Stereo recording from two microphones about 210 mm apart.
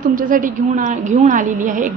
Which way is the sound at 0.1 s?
40° right (ahead or behind).